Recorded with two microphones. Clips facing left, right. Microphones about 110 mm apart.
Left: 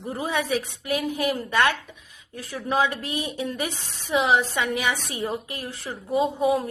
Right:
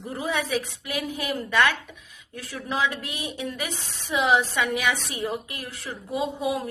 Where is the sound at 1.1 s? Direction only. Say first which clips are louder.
Right 2 dB; 35° left (ahead or behind).